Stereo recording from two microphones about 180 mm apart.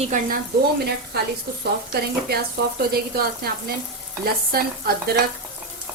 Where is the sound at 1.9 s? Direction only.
60° right (ahead or behind).